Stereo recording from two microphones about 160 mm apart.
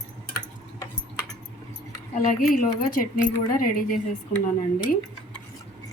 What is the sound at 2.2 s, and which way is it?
Speech, 65° left (ahead or behind).